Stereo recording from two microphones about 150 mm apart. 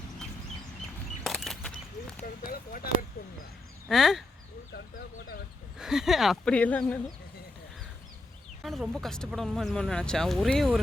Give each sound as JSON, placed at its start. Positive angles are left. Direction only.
{"t": 1.2, "sound": "a sound", "side_deg": 0}
{"t": 2.2, "sound": "a sound", "side_deg": 70}
{"t": 3.8, "sound": "speech", "side_deg": 0}
{"t": 4.7, "sound": "speech", "side_deg": 90}
{"t": 5.8, "sound": "speech", "side_deg": -5}
{"t": 8.6, "sound": "speech", "side_deg": 0}